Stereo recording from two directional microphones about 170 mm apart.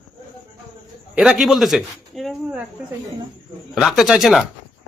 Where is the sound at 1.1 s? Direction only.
5° right (ahead or behind).